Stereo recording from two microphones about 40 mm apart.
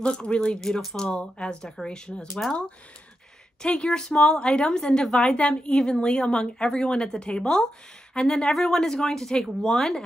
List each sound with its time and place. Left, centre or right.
0.0 s speech: left
0.6 s speech: centre